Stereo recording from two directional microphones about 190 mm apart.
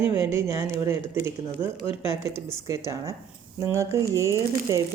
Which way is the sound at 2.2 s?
15° right (ahead or behind).